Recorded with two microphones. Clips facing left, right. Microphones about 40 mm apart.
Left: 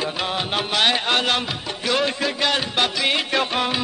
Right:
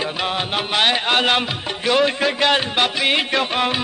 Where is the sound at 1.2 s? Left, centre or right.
Right.